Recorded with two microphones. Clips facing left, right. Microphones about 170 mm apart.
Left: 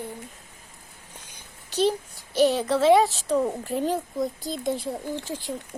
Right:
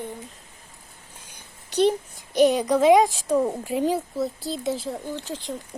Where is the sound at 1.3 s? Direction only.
60° right (ahead or behind).